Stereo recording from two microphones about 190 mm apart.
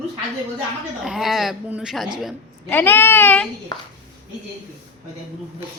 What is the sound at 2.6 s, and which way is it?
Speech, 10° left (ahead or behind).